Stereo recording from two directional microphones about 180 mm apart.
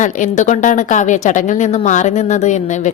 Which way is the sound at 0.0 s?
45° left (ahead or behind).